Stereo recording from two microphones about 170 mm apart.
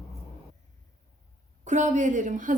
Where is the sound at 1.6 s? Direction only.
45° right (ahead or behind).